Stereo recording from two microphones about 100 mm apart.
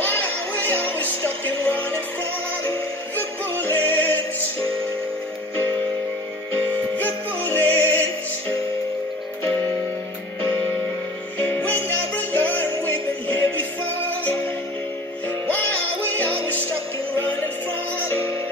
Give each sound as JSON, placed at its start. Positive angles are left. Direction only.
{"t": 0.8, "sound": "music", "side_deg": 20}
{"t": 3.2, "sound": "music", "side_deg": 20}
{"t": 7.0, "sound": "music", "side_deg": 20}
{"t": 11.3, "sound": "music", "side_deg": 20}